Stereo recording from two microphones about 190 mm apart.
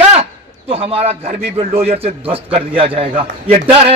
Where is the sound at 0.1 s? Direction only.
30° right (ahead or behind).